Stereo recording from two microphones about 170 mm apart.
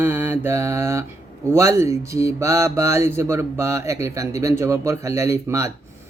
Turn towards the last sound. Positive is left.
turn(degrees=-15)  # may be behind; listen again after turning